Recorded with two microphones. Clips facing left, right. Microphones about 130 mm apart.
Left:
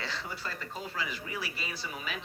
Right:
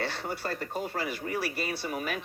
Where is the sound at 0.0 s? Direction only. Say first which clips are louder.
Right 6 dB; 60° right (ahead or behind).